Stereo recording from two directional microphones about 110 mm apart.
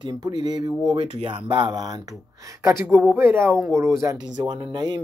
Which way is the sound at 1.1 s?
55° right (ahead or behind).